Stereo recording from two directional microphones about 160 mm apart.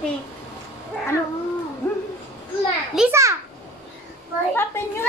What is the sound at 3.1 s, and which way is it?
Speech, 20° right (ahead or behind).